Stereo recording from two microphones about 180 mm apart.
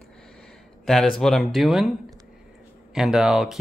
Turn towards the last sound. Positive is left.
turn(degrees=0)  # may be behind; listen again after turning